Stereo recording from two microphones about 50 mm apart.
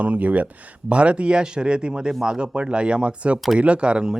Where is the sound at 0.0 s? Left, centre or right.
Right.